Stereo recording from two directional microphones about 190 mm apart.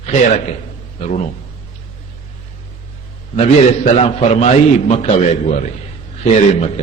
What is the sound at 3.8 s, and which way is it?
A man's voice, 35° left (ahead or behind).